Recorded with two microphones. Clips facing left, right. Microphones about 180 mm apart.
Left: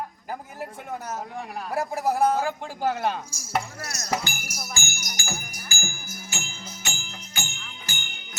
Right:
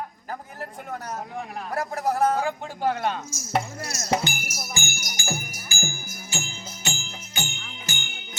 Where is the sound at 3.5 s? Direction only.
20° right (ahead or behind).